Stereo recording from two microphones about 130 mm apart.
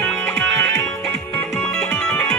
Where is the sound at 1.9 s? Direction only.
15° left (ahead or behind).